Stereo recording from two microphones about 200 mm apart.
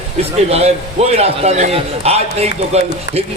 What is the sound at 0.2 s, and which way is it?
Speech, 30° right (ahead or behind).